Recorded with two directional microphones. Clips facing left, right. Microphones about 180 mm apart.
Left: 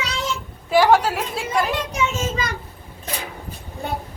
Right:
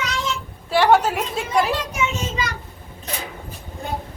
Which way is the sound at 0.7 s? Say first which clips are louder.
Left 1 dB; 5° left (ahead or behind).